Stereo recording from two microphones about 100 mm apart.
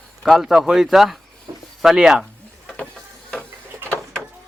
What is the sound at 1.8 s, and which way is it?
Speech, 5° right (ahead or behind).